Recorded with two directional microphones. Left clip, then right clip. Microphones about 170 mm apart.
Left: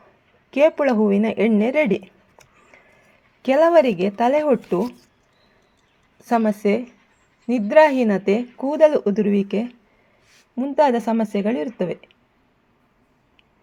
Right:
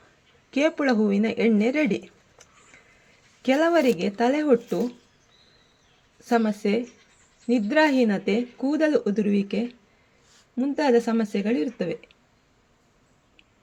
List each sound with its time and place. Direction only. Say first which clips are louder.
0.5 s speech: left 6 dB; 25° left (ahead or behind)
3.4 s speech: left 6 dB; 25° left (ahead or behind)
6.2 s speech: left 4 dB; 25° left (ahead or behind)